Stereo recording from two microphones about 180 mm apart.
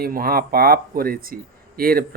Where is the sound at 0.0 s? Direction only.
55° right (ahead or behind).